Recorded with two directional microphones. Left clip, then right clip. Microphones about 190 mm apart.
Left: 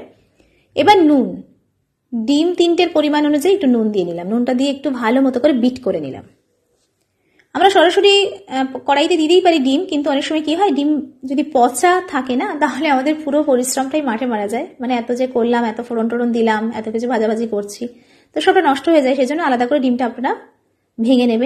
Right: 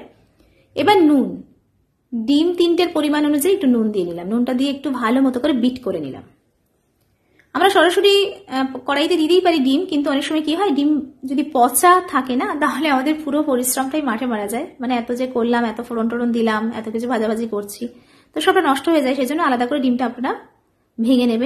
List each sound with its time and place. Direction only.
0.7 s a woman's voice: 5° left (ahead or behind)
7.5 s a woman's voice: 10° left (ahead or behind)